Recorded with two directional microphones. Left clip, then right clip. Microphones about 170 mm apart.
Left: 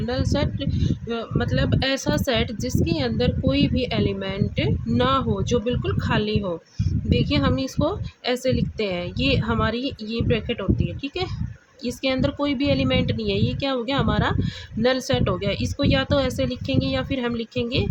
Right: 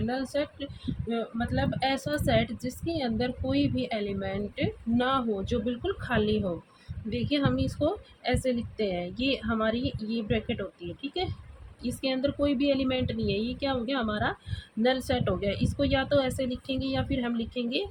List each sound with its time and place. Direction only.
0.1 s speech: 35° left (ahead or behind)
11.8 s speech: 35° left (ahead or behind)